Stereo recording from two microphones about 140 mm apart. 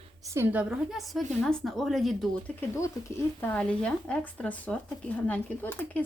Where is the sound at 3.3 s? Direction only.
10° left (ahead or behind).